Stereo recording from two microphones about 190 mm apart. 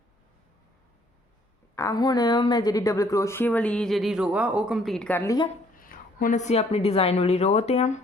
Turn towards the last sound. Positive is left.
turn(degrees=35)  # may be behind; listen again after turning